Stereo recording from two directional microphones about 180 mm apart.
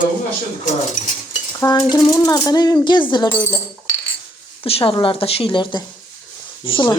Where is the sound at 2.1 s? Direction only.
20° left (ahead or behind).